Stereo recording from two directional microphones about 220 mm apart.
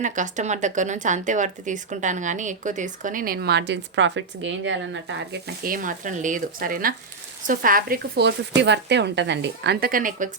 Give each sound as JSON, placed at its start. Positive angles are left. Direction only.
{"t": 0.0, "sound": "speech", "side_deg": -35}
{"t": 5.6, "sound": "speech", "side_deg": -40}